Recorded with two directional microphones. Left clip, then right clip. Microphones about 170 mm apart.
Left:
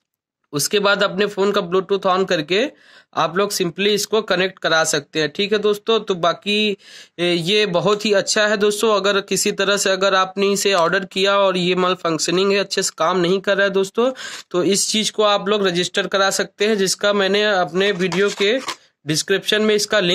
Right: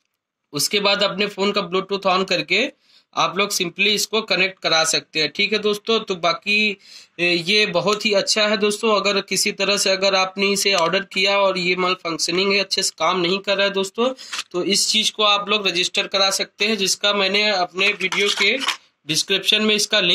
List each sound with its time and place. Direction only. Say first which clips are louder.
0.5 s speech: left 2 dB; 60° left (ahead or behind)
19.0 s speech: even; 55° left (ahead or behind)